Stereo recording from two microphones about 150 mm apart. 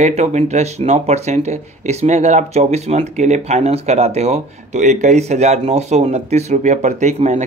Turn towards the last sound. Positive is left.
turn(degrees=-50)  # may be behind; listen again after turning